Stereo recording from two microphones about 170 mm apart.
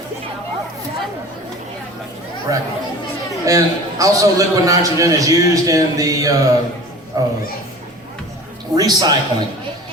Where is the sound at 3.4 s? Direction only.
20° right (ahead or behind).